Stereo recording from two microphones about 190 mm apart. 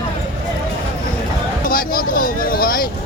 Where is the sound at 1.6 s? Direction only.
50° left (ahead or behind).